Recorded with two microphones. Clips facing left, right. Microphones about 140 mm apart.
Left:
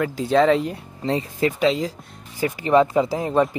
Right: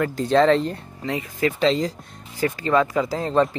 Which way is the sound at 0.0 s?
5° left (ahead or behind).